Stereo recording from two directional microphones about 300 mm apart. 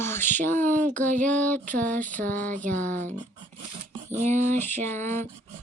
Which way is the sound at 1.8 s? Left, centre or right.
Centre.